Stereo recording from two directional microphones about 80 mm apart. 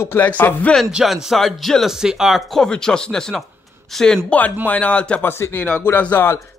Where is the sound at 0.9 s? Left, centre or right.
Centre.